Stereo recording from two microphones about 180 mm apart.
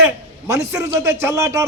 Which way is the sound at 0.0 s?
15° right (ahead or behind).